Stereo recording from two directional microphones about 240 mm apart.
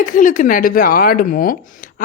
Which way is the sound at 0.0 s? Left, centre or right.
Left.